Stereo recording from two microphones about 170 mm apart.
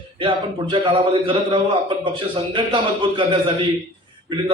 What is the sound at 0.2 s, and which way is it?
Speech, 30° right (ahead or behind).